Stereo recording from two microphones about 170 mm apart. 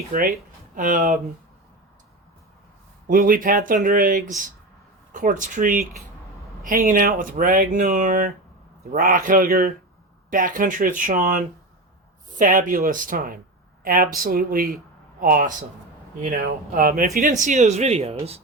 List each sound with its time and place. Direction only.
0.1 s speech: 55° right (ahead or behind)
3.1 s speech: 55° right (ahead or behind); by 18.4 s 35° right (ahead or behind)